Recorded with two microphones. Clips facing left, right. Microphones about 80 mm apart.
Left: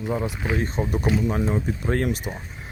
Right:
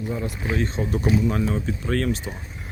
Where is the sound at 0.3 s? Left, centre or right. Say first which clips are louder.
Even; left.